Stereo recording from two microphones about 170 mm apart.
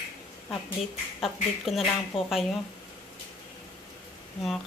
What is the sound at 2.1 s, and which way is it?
Speech, 30° left (ahead or behind).